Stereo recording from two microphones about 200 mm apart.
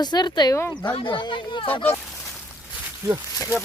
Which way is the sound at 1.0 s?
25° left (ahead or behind).